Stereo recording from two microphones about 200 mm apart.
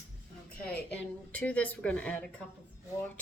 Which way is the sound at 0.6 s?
5° left (ahead or behind).